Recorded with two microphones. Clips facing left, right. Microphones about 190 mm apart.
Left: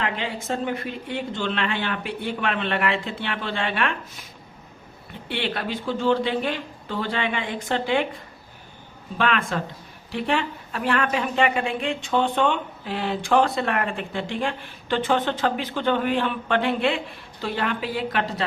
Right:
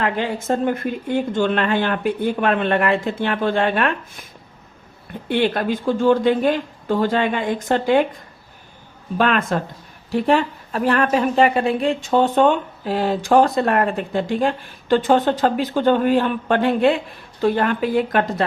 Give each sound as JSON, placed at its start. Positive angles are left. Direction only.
{"t": 0.4, "sound": "speech", "side_deg": -50}
{"t": 5.3, "sound": "speech", "side_deg": -45}
{"t": 9.1, "sound": "a woman's voice", "side_deg": -45}